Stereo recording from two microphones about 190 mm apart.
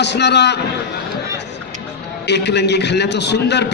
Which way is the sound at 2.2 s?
65° left (ahead or behind).